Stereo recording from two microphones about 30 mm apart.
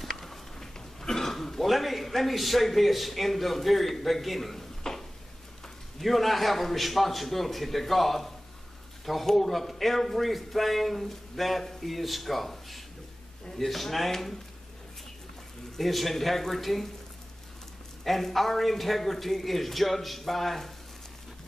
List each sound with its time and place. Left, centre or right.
0.0 s a sound: centre
1.0 s throat clearing: centre
1.7 s a man's voice: centre
4.9 s a sound: centre
5.9 s a man's voice: centre
15.8 s a man's voice: centre
18.0 s a man's voice: centre